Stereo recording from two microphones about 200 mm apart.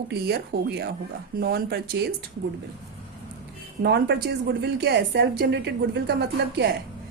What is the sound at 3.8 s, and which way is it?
A woman's voice, 55° right (ahead or behind).